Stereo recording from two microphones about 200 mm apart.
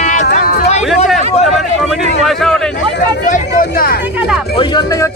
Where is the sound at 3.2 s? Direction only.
40° left (ahead or behind).